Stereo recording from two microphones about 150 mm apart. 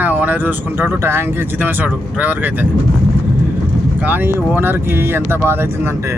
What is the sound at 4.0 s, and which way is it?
Speech, 10° right (ahead or behind).